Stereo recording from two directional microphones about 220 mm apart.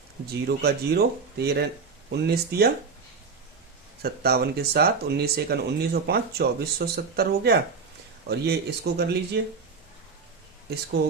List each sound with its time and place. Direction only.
0.4 s speech: 45° right (ahead or behind)
4.0 s speech: 45° right (ahead or behind)
10.7 s speech: 45° right (ahead or behind)